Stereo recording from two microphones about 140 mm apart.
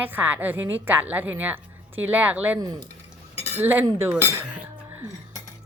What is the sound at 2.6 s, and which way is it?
Speech, 25° right (ahead or behind).